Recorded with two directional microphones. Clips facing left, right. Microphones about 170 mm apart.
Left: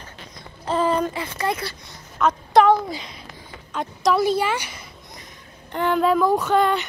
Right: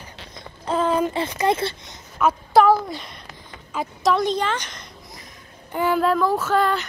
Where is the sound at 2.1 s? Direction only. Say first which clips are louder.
Even; 5° right (ahead or behind).